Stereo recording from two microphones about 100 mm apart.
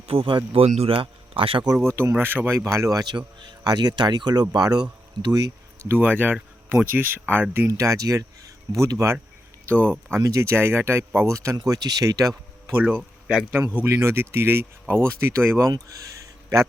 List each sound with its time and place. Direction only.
0.1 s speech: 65° right (ahead or behind)
1.9 s speech: 25° right (ahead or behind)
5.9 s speech: 20° right (ahead or behind)
7.7 s speech: 35° right (ahead or behind)
9.6 s speech: 15° left (ahead or behind)
9.9 s speech: 25° right (ahead or behind)
12.7 s speech: 20° right (ahead or behind)